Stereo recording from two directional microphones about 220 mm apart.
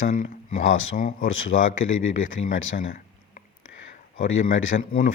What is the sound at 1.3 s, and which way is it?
Speech, 65° left (ahead or behind).